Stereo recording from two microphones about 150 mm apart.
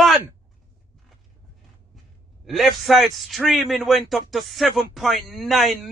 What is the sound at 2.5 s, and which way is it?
A man's voice, centre (ahead or behind).